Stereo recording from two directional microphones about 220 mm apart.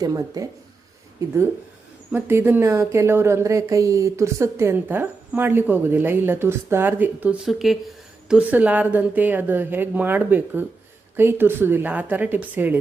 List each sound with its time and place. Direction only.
0.0 s a woman's voice: 15° right (ahead or behind)
2.1 s a woman's voice: 10° right (ahead or behind)